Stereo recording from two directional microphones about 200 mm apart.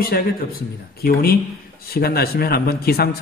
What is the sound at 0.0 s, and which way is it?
Speech, 50° left (ahead or behind).